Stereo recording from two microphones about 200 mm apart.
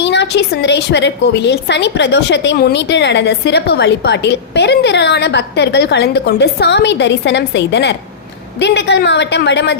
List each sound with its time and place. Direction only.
0.0 s a woman's voice: 60° left (ahead or behind)